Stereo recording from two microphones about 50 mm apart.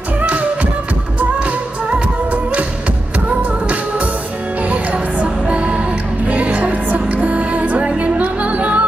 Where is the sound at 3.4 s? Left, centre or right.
Right.